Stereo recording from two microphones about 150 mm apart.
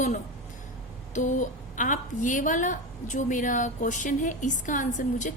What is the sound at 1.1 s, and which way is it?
A woman's voice, 55° left (ahead or behind).